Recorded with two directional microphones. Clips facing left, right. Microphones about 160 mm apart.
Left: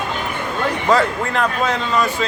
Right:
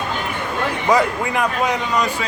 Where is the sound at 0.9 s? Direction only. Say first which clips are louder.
Even; 10° right (ahead or behind).